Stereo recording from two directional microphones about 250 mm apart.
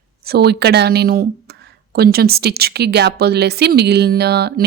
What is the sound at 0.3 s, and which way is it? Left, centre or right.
Speech, right.